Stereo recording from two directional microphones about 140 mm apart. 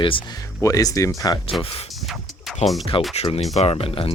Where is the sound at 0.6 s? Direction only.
25° left (ahead or behind).